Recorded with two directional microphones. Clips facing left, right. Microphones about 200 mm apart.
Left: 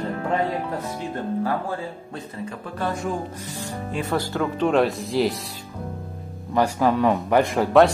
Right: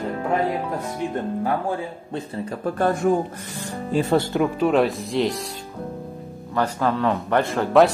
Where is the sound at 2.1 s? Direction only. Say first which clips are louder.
Right 8 dB; 30° right (ahead or behind).